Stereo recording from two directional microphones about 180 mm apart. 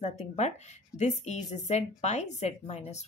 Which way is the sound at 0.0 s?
40° left (ahead or behind).